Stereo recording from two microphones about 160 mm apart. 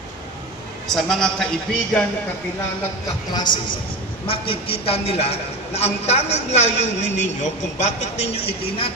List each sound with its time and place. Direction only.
0.9 s a man's voice: centre (ahead or behind)
3.3 s a man's voice: 30° left (ahead or behind); by 8.4 s 45° left (ahead or behind)